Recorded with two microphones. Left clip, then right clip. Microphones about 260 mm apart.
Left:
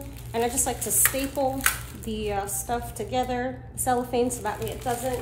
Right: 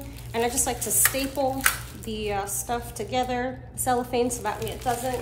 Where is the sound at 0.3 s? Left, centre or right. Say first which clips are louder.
Even; right.